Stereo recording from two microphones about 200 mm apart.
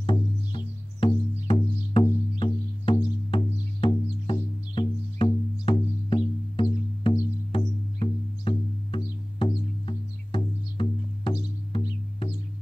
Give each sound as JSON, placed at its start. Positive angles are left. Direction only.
{"t": 0.0, "sound": "music", "side_deg": 25}